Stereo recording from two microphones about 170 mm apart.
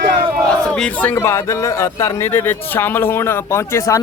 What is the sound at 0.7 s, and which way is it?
A man's voice, 5° left (ahead or behind).